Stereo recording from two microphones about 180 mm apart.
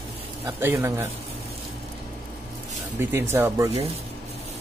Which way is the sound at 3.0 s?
15° right (ahead or behind).